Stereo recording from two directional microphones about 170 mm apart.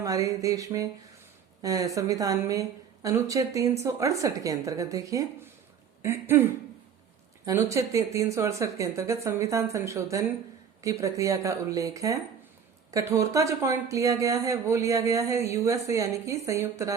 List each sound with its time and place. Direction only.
0.0 s speech: 20° right (ahead or behind)